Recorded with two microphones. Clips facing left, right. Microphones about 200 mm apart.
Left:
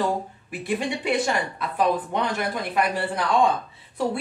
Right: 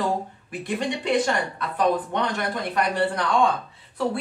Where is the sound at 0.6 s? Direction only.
5° left (ahead or behind).